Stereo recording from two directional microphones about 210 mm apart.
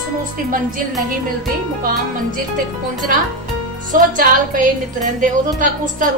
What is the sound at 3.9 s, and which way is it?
A woman's voice, 40° right (ahead or behind).